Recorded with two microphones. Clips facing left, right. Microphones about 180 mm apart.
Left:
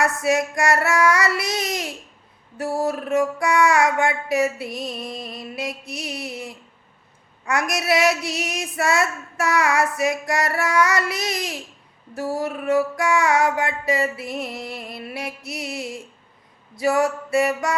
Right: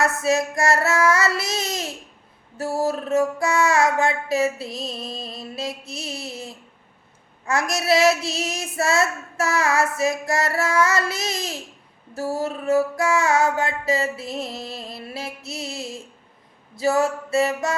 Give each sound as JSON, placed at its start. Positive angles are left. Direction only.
{"t": 0.0, "sound": "child singing", "side_deg": -25}